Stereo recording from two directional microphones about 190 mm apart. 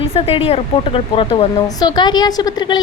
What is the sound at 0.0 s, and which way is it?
A woman's voice, 30° left (ahead or behind).